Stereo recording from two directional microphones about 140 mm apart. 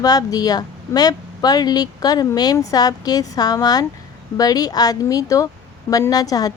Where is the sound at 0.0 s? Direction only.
25° left (ahead or behind).